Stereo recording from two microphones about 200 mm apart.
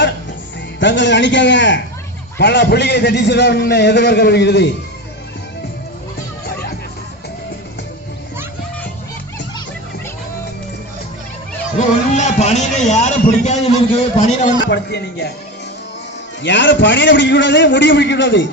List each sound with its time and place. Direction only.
0.8 s a man's voice: 65° left (ahead or behind)
11.8 s a man's voice: 35° left (ahead or behind)
14.6 s a man's voice: 55° left (ahead or behind)
16.4 s a man's voice: 65° left (ahead or behind)